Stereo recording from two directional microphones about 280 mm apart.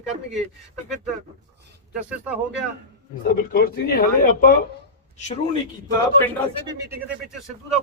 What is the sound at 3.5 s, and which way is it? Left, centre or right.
Speech, left.